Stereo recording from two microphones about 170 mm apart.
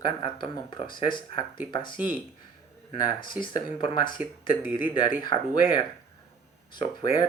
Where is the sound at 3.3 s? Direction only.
30° left (ahead or behind).